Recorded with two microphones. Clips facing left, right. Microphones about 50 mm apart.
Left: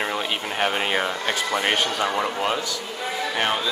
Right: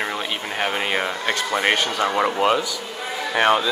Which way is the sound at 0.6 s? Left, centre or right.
Centre.